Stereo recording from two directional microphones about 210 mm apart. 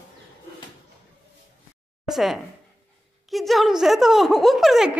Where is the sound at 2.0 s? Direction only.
Centre (ahead or behind).